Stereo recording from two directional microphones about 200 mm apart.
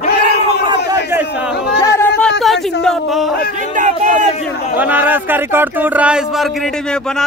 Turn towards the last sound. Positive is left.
turn(degrees=-5)  # may be behind; listen again after turning